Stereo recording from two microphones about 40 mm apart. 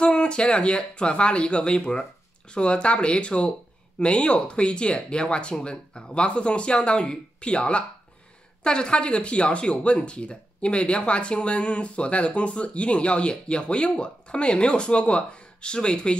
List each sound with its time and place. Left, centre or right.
0.0 s speech: left